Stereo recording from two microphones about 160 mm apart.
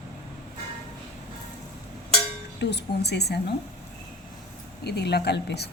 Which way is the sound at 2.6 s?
90° left.